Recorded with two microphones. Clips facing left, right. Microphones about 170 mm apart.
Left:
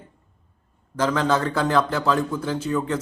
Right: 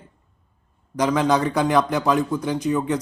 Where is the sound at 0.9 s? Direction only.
15° right (ahead or behind).